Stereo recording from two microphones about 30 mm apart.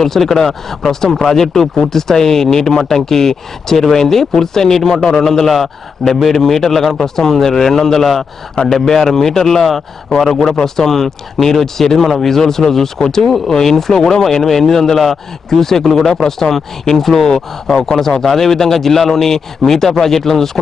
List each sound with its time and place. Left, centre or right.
0.0 s speech: centre